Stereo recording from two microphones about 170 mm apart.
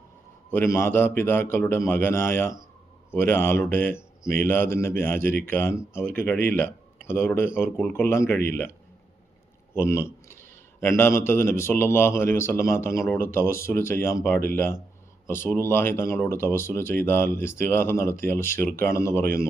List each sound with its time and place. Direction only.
0.5 s a man's voice: 15° left (ahead or behind)
9.7 s a man's voice: 15° left (ahead or behind)
19.2 s speech: 60° right (ahead or behind)